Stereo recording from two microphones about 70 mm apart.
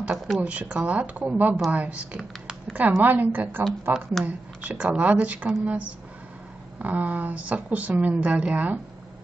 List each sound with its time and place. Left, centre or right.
0.4 s speech: centre